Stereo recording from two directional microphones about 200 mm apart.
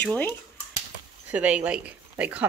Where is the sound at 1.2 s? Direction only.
5° right (ahead or behind).